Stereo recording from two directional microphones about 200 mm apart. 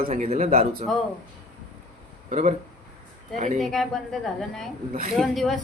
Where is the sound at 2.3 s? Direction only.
35° right (ahead or behind).